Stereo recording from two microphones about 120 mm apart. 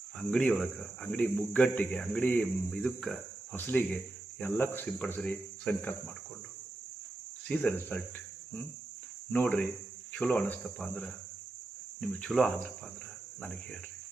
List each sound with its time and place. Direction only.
0.2 s speech: 10° left (ahead or behind)
2.6 s cricket: 5° left (ahead or behind)
3.5 s speech: 15° left (ahead or behind)
7.4 s speech: 10° left (ahead or behind)
9.3 s speech: 15° left (ahead or behind)
11.9 s cricket: 5° left (ahead or behind)
13.4 s speech: 10° left (ahead or behind)